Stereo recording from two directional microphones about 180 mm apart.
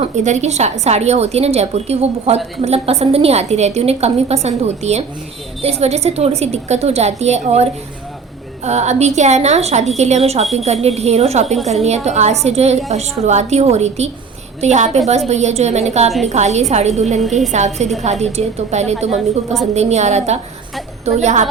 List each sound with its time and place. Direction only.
0.0 s a woman's voice: 40° right (ahead or behind)